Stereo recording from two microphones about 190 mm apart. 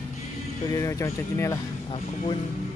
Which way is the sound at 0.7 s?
15° left (ahead or behind).